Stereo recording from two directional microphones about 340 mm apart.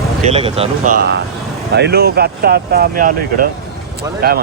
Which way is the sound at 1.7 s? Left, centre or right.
Right.